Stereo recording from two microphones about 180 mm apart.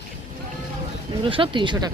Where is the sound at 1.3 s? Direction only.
30° right (ahead or behind).